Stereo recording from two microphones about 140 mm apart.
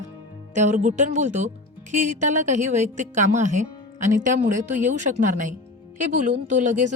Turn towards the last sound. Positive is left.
turn(degrees=-60)  # may be behind; listen again after turning